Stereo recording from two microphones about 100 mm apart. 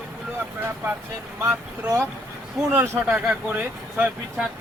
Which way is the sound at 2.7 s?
20° right (ahead or behind).